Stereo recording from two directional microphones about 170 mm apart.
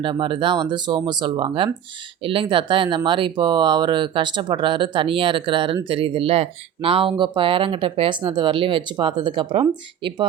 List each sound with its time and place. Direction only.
0.0 s speech: 30° right (ahead or behind)